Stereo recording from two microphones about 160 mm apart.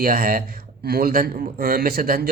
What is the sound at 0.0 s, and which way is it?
A man's voice, 65° right (ahead or behind).